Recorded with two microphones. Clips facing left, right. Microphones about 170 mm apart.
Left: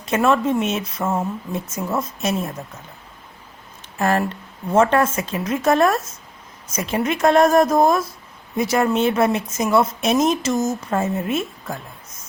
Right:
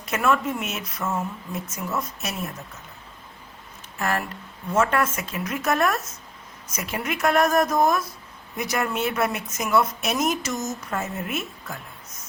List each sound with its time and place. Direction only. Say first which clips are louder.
0.1 s a woman's voice: left 5 dB; 30° left (ahead or behind)
3.9 s a woman's voice: left 7 dB; 30° left (ahead or behind)